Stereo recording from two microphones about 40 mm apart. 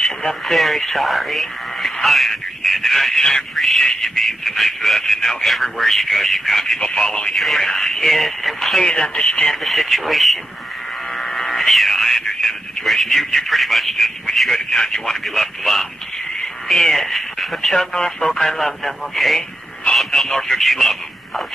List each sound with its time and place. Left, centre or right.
0.0 s speech: centre
3.5 s a sound: centre
4.0 s speech: centre
6.9 s speech: left; by 8.8 s centre
8.8 s speech: centre
9.7 s speech: centre
11.2 s a sound: centre
14.5 s speech: centre